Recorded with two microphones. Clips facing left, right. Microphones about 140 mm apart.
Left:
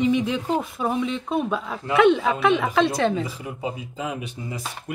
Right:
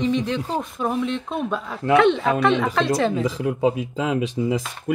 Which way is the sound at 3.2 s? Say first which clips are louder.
Right 10 dB; 90° right.